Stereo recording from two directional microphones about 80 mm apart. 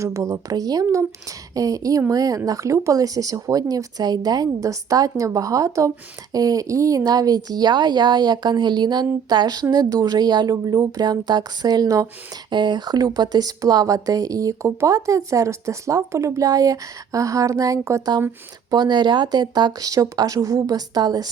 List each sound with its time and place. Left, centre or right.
0.0 s speech: right
12.5 s speech: right
18.7 s speech: right